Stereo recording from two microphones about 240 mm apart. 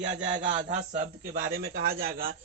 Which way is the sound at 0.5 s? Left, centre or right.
Right.